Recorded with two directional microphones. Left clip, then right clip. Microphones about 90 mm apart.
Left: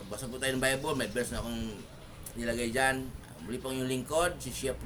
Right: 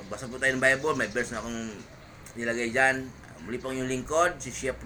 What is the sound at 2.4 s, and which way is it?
A man's voice, 10° left (ahead or behind).